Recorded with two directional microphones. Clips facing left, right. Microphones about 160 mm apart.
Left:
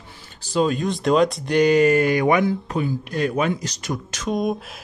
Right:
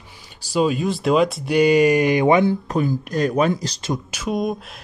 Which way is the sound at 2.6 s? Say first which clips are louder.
Right 3 dB; 40° right (ahead or behind).